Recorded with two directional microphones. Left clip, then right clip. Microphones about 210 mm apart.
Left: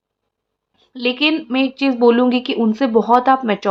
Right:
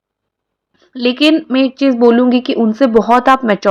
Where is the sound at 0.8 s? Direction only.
20° right (ahead or behind).